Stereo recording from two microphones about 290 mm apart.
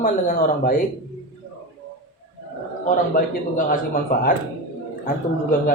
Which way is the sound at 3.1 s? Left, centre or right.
Left.